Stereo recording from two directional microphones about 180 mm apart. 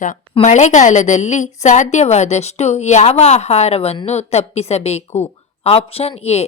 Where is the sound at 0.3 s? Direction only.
40° left (ahead or behind).